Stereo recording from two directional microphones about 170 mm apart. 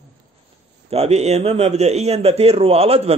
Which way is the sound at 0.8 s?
40° right (ahead or behind).